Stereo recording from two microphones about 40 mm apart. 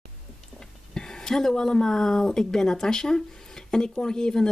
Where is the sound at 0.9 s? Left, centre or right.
Centre.